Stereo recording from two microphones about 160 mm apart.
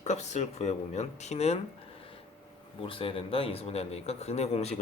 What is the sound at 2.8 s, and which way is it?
A man's voice, 35° left (ahead or behind).